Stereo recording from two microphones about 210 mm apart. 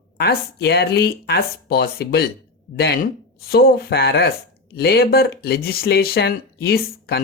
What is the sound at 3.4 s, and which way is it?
Speech, 45° left (ahead or behind).